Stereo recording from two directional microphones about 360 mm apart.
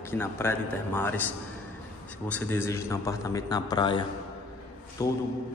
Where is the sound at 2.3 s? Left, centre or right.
Centre.